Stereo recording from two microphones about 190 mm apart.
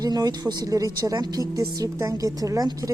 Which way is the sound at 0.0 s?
20° right (ahead or behind).